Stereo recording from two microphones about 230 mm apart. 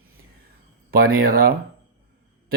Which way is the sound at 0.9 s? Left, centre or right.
Right.